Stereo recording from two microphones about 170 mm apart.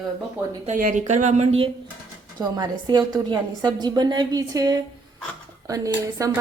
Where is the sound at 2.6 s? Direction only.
25° right (ahead or behind).